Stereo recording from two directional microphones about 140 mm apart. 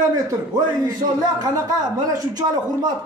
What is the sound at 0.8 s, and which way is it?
Speech, 25° right (ahead or behind).